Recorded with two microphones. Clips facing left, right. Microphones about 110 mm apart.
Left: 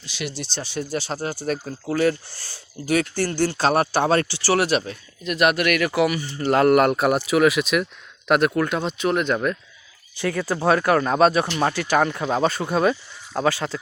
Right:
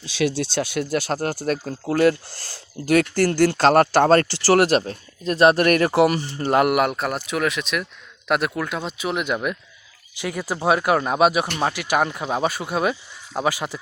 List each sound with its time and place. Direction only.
0.5 s speech: 60° right (ahead or behind); by 6.7 s 20° right (ahead or behind)
6.9 s speech: 5° left (ahead or behind); by 13.7 s 15° right (ahead or behind)